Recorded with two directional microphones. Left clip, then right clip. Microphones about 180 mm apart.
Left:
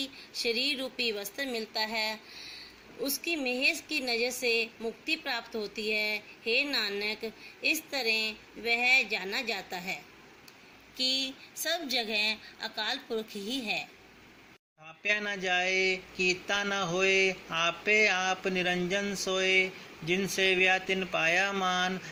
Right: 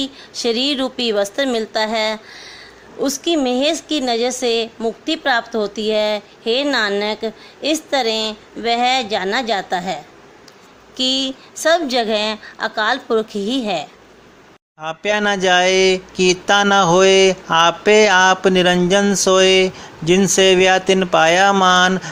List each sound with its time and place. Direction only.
0.0 s a woman's voice: 50° right (ahead or behind)
14.8 s speech: 60° right (ahead or behind)